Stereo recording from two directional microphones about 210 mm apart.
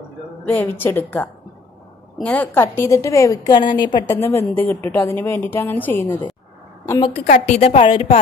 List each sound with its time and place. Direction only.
0.5 s a woman's voice: 10° left (ahead or behind)
7.2 s a woman's voice: 35° left (ahead or behind)